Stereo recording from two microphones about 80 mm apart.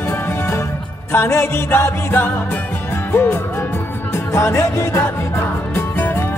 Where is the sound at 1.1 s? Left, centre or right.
Left.